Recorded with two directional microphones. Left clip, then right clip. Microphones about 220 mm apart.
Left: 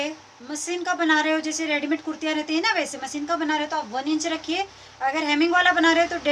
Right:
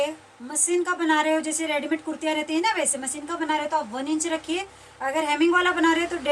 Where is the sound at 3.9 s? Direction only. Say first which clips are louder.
Left 1 dB; 30° left (ahead or behind).